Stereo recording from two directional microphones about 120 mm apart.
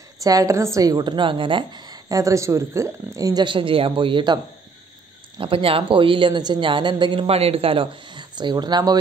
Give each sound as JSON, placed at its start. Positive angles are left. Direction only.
{"t": 0.2, "sound": "a woman's voice", "side_deg": -30}
{"t": 5.4, "sound": "a man's voice", "side_deg": -50}